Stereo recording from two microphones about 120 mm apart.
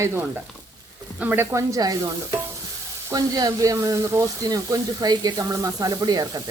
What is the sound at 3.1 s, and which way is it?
Speech, 30° right (ahead or behind).